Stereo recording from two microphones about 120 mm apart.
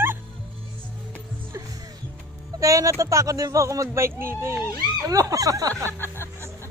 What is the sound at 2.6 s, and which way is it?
Speech, 25° right (ahead or behind).